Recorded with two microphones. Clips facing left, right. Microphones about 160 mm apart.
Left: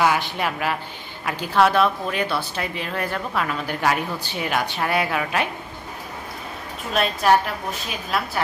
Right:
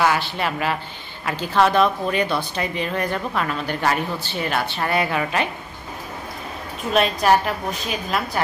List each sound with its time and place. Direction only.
0.0 s speech: 10° left (ahead or behind)
6.9 s speech: centre (ahead or behind)